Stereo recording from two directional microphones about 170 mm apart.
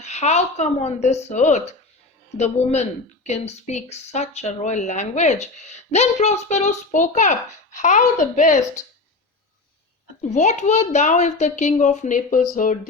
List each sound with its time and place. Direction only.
0.0 s speech: 40° left (ahead or behind)
10.2 s speech: 45° left (ahead or behind)